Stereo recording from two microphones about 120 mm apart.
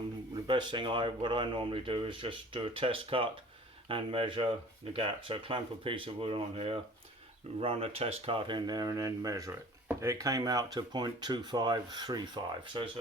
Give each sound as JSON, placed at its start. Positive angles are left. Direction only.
{"t": 0.4, "sound": "speech", "side_deg": -40}